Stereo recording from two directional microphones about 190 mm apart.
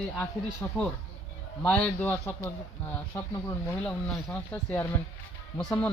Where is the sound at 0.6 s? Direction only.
10° left (ahead or behind).